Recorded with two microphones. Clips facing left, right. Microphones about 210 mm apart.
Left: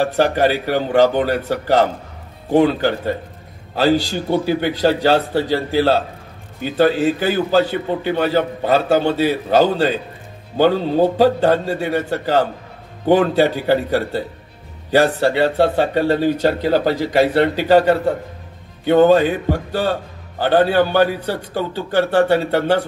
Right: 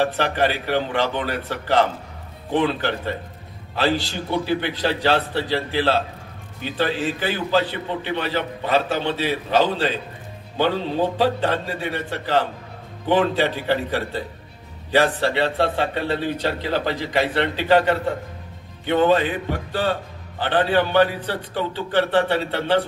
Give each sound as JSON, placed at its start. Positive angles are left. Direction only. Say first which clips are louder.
{"t": 0.0, "sound": "a man's voice", "louder": "left 5 dB", "side_deg": 40}